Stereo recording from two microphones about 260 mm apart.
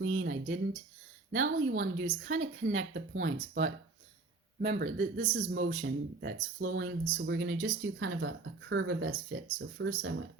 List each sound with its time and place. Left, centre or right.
0.0 s speech: right